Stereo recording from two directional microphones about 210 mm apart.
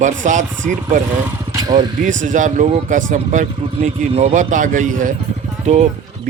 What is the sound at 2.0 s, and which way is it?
Speech, 35° right (ahead or behind).